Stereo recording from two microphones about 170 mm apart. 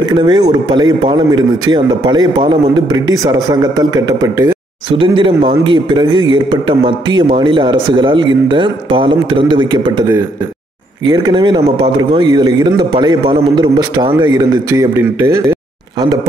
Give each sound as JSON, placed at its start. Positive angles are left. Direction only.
{"t": 0.0, "sound": "a man's voice", "side_deg": -25}
{"t": 4.9, "sound": "a man's voice", "side_deg": -30}
{"t": 11.1, "sound": "a man's voice", "side_deg": -25}